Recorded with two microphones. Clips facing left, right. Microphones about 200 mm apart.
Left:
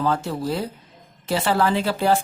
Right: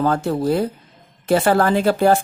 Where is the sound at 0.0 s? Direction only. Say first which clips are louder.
Right 5 dB; 50° right (ahead or behind).